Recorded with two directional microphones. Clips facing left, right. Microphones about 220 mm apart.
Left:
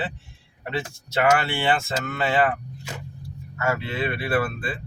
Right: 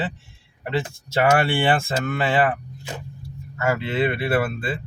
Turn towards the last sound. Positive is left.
turn(degrees=-25)  # may be behind; listen again after turning